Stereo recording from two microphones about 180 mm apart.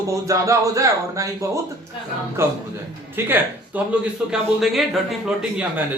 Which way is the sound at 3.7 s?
10° right (ahead or behind).